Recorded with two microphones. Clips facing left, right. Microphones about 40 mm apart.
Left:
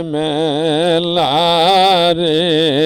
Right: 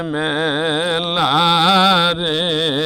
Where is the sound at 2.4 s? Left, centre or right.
Centre.